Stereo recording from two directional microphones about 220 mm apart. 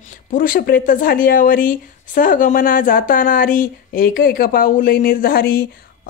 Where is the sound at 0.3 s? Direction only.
40° left (ahead or behind).